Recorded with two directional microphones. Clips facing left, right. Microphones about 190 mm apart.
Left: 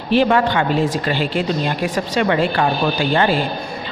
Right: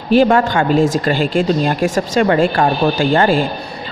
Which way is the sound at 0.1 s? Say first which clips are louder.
Right 3 dB; 45° right (ahead or behind).